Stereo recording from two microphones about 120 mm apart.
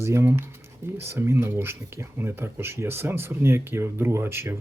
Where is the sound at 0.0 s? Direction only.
25° right (ahead or behind).